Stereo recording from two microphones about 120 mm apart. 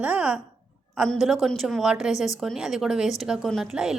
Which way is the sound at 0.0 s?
10° right (ahead or behind).